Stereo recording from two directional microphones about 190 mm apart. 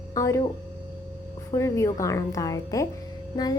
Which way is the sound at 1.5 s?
15° left (ahead or behind).